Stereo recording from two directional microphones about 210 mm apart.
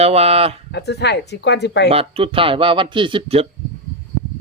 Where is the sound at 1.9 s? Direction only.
25° right (ahead or behind).